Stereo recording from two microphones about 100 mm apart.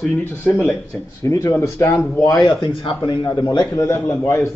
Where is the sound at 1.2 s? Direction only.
30° left (ahead or behind).